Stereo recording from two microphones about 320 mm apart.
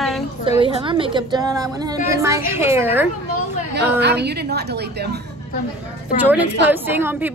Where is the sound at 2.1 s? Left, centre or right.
Centre.